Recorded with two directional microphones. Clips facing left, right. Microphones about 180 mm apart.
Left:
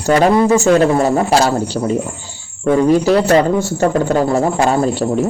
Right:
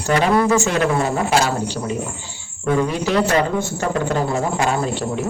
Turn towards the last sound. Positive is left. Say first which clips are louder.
# left 6 dB
turn(degrees=35)  # may be behind; listen again after turning